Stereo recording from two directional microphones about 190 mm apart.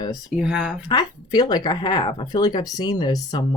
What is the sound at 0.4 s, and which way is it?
Speech, 5° right (ahead or behind).